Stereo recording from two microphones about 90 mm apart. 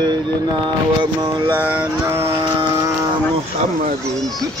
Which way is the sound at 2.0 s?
30° right (ahead or behind).